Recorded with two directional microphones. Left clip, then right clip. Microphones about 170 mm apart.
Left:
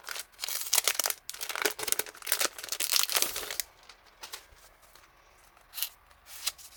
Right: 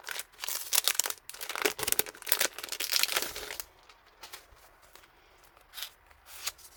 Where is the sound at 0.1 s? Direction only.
10° right (ahead or behind).